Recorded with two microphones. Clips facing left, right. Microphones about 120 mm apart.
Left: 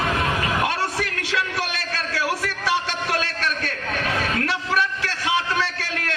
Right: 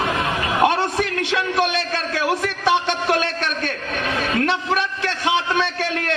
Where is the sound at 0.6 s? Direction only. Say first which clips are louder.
Right 5 dB; 25° right (ahead or behind).